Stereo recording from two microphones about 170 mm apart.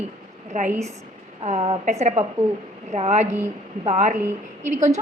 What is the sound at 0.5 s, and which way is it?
A woman's voice, 45° right (ahead or behind).